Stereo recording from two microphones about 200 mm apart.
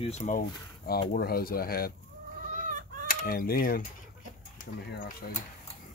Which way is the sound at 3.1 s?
45° left (ahead or behind).